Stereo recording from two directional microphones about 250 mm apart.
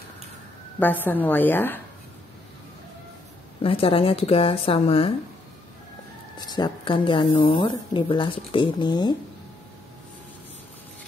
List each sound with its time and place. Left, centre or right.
0.7 s a woman's voice: centre
3.6 s speech: left
6.3 s speech: centre